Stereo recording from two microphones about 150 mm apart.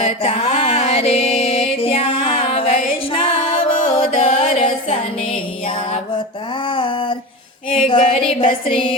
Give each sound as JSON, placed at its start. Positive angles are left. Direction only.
{"t": 0.0, "sound": "music", "side_deg": 40}
{"t": 4.1, "sound": "music", "side_deg": 55}
{"t": 6.7, "sound": "a sound", "side_deg": 35}